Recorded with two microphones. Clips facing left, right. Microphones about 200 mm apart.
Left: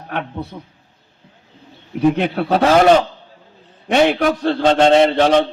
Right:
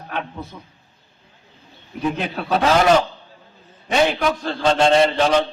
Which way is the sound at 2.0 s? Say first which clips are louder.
Left 8 dB; 65° left (ahead or behind).